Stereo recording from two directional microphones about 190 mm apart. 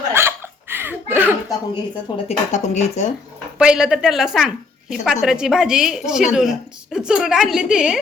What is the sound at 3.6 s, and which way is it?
A woman's voice, 5° right (ahead or behind).